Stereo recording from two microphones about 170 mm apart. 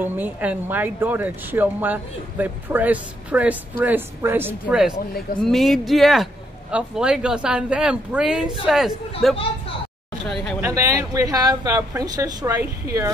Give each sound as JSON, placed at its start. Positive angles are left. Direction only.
{"t": 0.0, "sound": "speech", "side_deg": -10}
{"t": 10.6, "sound": "a woman's voice", "side_deg": -20}